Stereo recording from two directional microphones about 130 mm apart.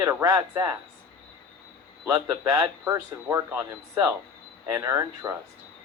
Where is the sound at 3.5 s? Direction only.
15° right (ahead or behind).